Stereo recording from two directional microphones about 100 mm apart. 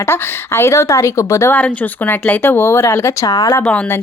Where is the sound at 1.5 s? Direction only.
15° left (ahead or behind).